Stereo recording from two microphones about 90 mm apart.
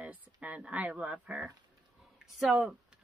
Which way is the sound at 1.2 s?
5° right (ahead or behind).